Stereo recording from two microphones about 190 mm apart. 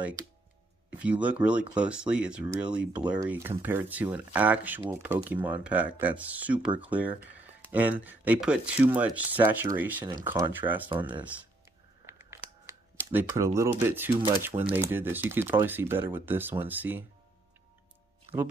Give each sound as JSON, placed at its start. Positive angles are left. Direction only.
{"t": 0.9, "sound": "speech", "side_deg": -5}
{"t": 12.1, "sound": "crumpling", "side_deg": -15}
{"t": 13.6, "sound": "speech", "side_deg": -10}